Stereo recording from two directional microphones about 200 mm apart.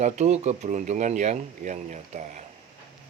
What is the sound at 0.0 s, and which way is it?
Speech, 35° right (ahead or behind).